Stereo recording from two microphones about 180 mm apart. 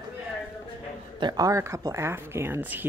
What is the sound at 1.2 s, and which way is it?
Speech, 20° right (ahead or behind).